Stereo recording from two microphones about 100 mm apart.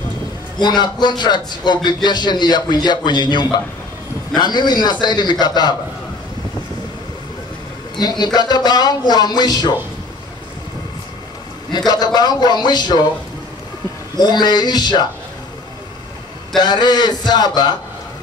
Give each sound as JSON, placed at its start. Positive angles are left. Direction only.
{"t": 0.6, "sound": "speech", "side_deg": 45}
{"t": 8.0, "sound": "speech", "side_deg": 45}
{"t": 11.7, "sound": "speech", "side_deg": 45}
{"t": 14.1, "sound": "speech", "side_deg": 45}
{"t": 16.5, "sound": "speech", "side_deg": 45}